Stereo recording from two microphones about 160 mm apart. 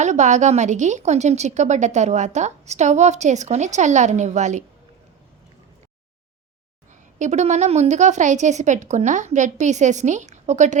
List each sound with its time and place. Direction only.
0.0 s a woman's voice: 45° right (ahead or behind)
7.2 s a woman's voice: 45° right (ahead or behind)